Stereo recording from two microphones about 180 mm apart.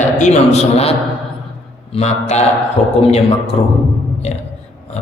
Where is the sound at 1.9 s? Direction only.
35° left (ahead or behind).